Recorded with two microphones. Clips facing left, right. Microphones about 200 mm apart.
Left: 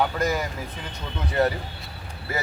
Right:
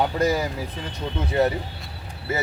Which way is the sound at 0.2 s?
35° right (ahead or behind).